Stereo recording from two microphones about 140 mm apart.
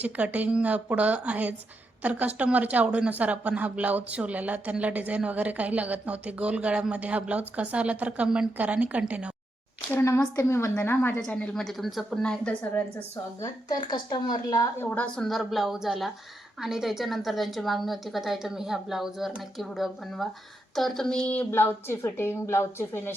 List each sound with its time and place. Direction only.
0.0 s speech: 10° right (ahead or behind)
9.9 s a woman's voice: 20° left (ahead or behind)
13.4 s a woman's voice: 30° left (ahead or behind)
14.8 s a woman's voice: 15° left (ahead or behind)